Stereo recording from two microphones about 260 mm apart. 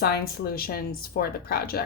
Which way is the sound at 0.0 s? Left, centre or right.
Left.